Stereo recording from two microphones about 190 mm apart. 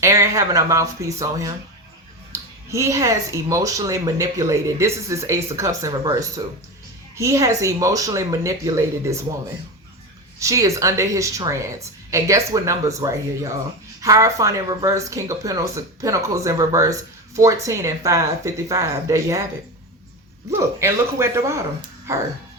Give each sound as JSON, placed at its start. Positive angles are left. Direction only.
{"t": 0.0, "sound": "speech", "side_deg": -15}
{"t": 2.6, "sound": "speech", "side_deg": -15}
{"t": 10.4, "sound": "speech", "side_deg": -15}
{"t": 20.6, "sound": "speech", "side_deg": -15}